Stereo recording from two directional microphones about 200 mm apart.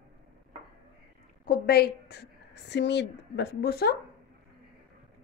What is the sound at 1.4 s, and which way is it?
A woman's voice, 50° left (ahead or behind).